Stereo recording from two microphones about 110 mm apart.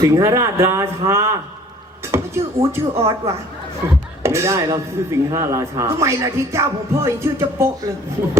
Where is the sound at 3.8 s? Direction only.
25° right (ahead or behind).